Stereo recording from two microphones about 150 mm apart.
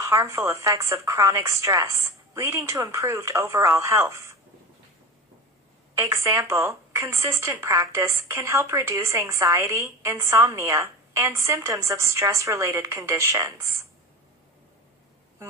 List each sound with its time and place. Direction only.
0.0 s a woman's voice: 20° right (ahead or behind)
5.9 s a woman's voice: 20° right (ahead or behind)